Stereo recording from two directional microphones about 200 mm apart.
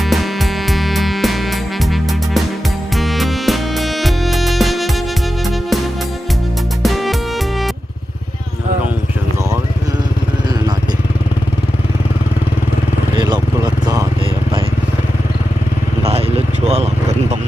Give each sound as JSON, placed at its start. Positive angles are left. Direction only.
{"t": 0.0, "sound": "music", "side_deg": 0}
{"t": 13.1, "sound": "vehicle", "side_deg": -20}
{"t": 16.0, "sound": "vehicle", "side_deg": -30}